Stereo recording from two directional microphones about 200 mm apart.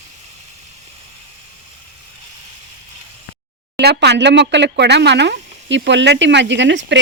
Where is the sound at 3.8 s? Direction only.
55° right (ahead or behind).